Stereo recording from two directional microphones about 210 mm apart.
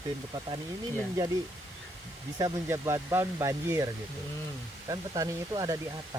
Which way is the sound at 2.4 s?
15° right (ahead or behind).